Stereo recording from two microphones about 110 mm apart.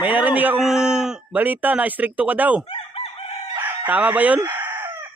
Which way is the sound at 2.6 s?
65° left (ahead or behind).